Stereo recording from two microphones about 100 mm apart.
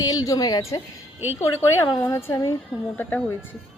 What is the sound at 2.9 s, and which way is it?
Speech, 20° left (ahead or behind).